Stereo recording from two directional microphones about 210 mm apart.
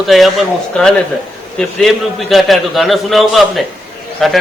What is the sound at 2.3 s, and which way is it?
A man's voice, centre (ahead or behind).